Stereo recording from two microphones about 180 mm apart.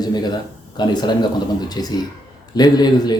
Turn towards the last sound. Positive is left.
turn(degrees=20)  # may be behind; listen again after turning